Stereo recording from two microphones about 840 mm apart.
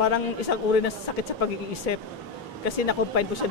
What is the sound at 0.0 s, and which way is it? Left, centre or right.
A man's voice, left.